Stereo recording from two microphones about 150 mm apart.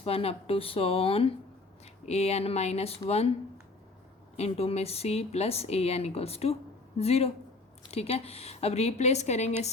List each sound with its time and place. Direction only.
0.0 s speech: 40° left (ahead or behind)
4.4 s speech: 45° left (ahead or behind)